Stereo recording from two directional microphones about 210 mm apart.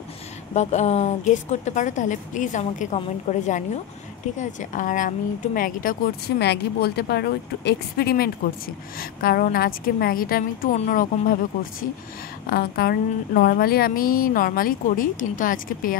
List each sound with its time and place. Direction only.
0.6 s a woman's voice: 30° left (ahead or behind)
12.4 s speech: 45° left (ahead or behind)